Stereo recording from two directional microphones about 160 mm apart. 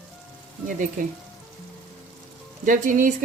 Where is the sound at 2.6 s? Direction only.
55° right (ahead or behind).